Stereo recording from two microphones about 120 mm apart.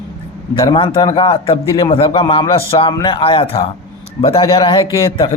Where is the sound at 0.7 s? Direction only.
50° left (ahead or behind).